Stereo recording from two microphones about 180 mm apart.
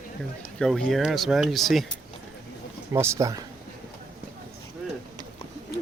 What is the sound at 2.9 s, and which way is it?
Speech, 15° right (ahead or behind).